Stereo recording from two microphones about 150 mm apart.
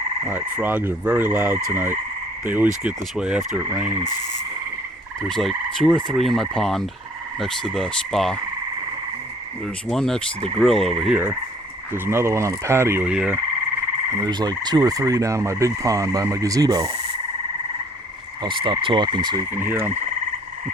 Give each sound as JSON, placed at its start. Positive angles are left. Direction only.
{"t": 0.3, "sound": "frog", "side_deg": -10}
{"t": 5.3, "sound": "fowl", "side_deg": 0}
{"t": 9.9, "sound": "fowl", "side_deg": 5}
{"t": 11.1, "sound": "frog", "side_deg": -15}
{"t": 14.2, "sound": "speech", "side_deg": -30}
{"t": 18.4, "sound": "speech", "side_deg": -35}
{"t": 19.5, "sound": "frog", "side_deg": -15}